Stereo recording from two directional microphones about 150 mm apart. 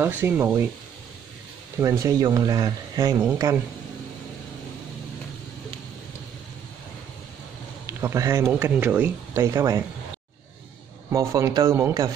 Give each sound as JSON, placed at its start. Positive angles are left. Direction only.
{"t": 0.0, "sound": "speech", "side_deg": -15}
{"t": 1.8, "sound": "speech", "side_deg": -20}
{"t": 7.8, "sound": "speech", "side_deg": -20}
{"t": 11.1, "sound": "speech", "side_deg": -20}